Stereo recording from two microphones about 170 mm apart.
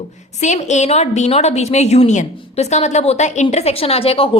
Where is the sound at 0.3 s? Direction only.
45° left (ahead or behind).